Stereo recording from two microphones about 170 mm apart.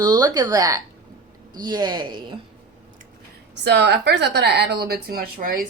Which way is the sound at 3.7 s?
80° right.